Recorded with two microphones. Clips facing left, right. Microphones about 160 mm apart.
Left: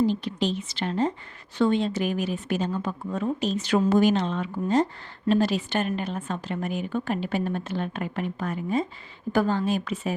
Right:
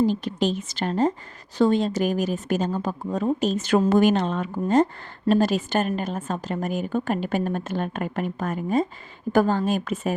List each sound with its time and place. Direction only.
0.0 s a woman's voice: 45° right (ahead or behind)